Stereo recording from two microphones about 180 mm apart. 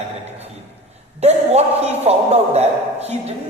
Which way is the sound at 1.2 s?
35° right (ahead or behind).